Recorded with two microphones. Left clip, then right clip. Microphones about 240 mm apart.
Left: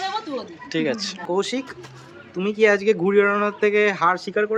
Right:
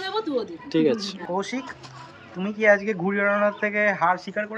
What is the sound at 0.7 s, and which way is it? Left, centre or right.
Speech, centre.